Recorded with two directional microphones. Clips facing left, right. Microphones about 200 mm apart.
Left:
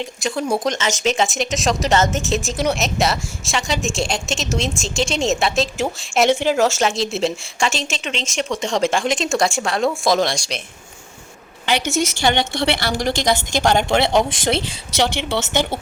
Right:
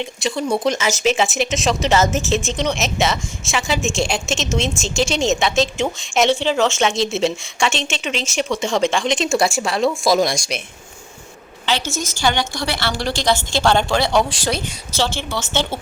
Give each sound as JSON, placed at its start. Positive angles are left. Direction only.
{"t": 0.0, "sound": "a woman's voice", "side_deg": 0}
{"t": 11.9, "sound": "a woman's voice", "side_deg": 70}
{"t": 12.2, "sound": "a woman's voice", "side_deg": 25}